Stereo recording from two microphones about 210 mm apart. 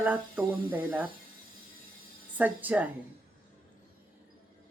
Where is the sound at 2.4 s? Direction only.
10° right (ahead or behind).